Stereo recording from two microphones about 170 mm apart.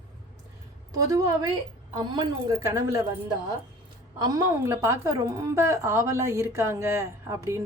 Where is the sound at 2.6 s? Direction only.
15° right (ahead or behind).